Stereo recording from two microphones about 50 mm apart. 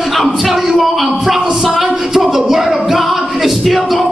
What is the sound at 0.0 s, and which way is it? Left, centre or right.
A man's voice, centre.